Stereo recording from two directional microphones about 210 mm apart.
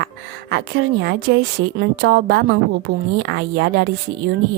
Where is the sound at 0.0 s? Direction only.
50° right (ahead or behind).